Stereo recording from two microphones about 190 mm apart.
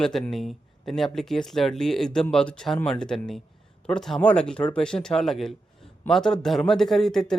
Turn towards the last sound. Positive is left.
turn(degrees=0)  # may be behind; listen again after turning